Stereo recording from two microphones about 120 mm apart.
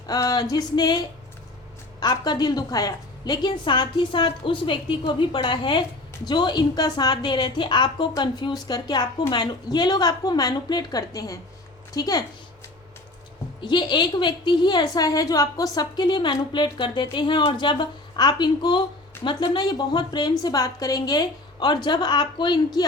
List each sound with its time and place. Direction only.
0.1 s a sound: 30° left (ahead or behind)
0.5 s a woman's voice: 35° left (ahead or behind)
13.6 s a woman's voice: 40° left (ahead or behind)